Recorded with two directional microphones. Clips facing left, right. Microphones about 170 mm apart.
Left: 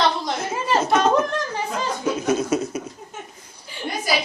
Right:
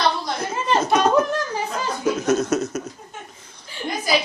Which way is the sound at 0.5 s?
10° left (ahead or behind).